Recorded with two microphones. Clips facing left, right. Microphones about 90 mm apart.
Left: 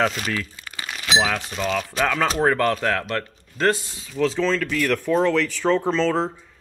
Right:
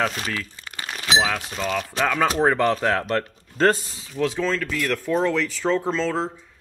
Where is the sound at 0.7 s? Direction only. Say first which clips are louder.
Right 1 dB; 35° right (ahead or behind).